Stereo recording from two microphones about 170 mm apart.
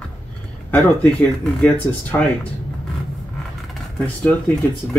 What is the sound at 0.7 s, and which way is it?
Speech, 5° left (ahead or behind).